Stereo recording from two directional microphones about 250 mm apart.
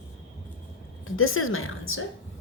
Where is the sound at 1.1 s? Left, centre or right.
Left.